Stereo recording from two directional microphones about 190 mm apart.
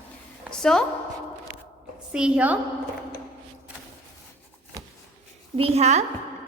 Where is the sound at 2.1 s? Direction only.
5° right (ahead or behind).